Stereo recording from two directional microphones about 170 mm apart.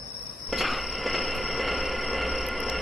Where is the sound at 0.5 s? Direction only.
Centre (ahead or behind).